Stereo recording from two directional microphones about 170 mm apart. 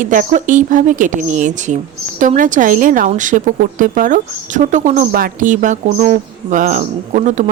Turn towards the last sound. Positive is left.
turn(degrees=-50)  # may be behind; listen again after turning